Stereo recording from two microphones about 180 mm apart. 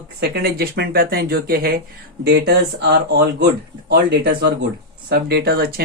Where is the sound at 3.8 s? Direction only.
70° right (ahead or behind).